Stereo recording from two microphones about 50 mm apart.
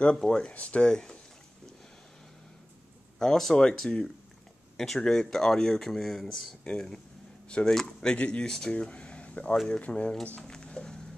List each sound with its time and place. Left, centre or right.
0.2 s speech: centre
0.8 s speech: centre
3.2 s speech: centre
6.7 s speech: centre
10.4 s a sound: centre